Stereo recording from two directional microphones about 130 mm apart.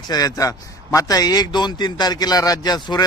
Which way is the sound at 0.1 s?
30° left (ahead or behind).